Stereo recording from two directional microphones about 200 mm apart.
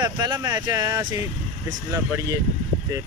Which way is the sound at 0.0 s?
20° right (ahead or behind).